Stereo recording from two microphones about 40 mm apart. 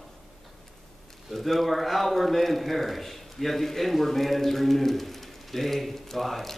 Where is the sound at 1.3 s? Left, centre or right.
Centre.